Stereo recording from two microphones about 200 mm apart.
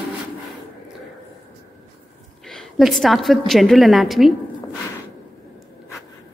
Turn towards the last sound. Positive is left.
turn(degrees=0)  # may be behind; listen again after turning